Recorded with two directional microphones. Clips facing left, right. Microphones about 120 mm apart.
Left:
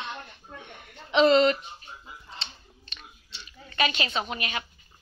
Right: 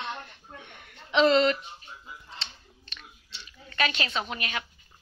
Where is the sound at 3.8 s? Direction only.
10° left (ahead or behind).